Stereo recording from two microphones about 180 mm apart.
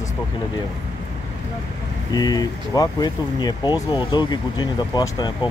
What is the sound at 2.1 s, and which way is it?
Speech, 20° left (ahead or behind).